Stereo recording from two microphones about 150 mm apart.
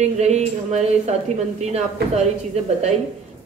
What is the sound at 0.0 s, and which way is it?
A woman's voice, 50° right (ahead or behind).